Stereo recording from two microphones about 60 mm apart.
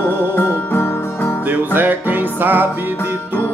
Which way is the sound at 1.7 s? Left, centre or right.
Right.